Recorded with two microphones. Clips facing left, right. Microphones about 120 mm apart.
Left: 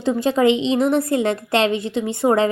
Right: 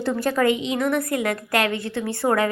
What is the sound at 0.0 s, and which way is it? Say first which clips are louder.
A woman's voice: left 4 dB; 20° left (ahead or behind).